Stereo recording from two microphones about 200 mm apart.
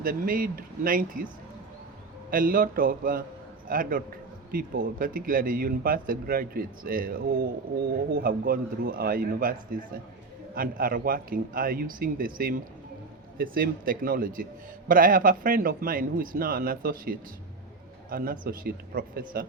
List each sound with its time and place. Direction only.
0.0 s speech: 45° right (ahead or behind)
2.3 s speech: 45° right (ahead or behind)